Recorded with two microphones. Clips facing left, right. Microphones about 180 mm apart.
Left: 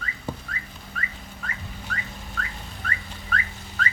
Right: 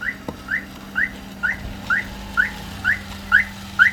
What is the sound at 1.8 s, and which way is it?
Car alarm, 75° right (ahead or behind).